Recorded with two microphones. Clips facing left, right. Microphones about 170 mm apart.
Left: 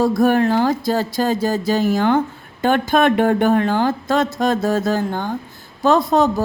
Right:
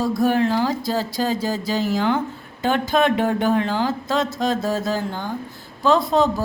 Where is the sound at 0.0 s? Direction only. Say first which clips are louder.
Left 4 dB; 55° left (ahead or behind).